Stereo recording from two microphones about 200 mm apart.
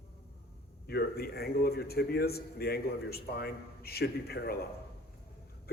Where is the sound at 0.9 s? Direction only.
50° left (ahead or behind).